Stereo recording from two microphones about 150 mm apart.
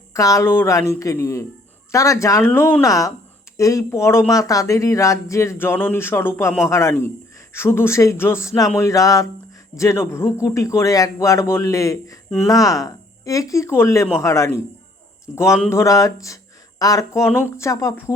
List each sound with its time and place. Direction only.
0.1 s speech: 20° left (ahead or behind)
7.5 s a sound: 15° left (ahead or behind)
8.8 s speech: 20° left (ahead or behind)
15.7 s speech: 20° left (ahead or behind)